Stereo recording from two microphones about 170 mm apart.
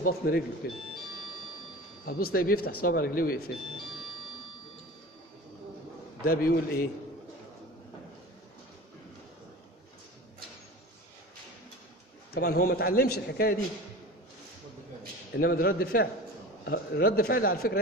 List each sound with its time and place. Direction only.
0.0 s speech: 65° left (ahead or behind)
2.0 s speech: 60° left (ahead or behind)
6.2 s speech: 60° left (ahead or behind)
12.4 s speech: 65° left (ahead or behind)
15.3 s speech: 65° left (ahead or behind)
16.6 s speech: 75° left (ahead or behind)